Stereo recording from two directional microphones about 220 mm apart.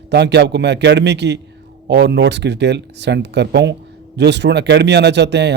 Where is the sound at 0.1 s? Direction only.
50° right (ahead or behind).